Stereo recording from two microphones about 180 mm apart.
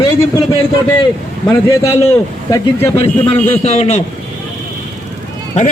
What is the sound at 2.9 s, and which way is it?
A man's voice, 30° left (ahead or behind).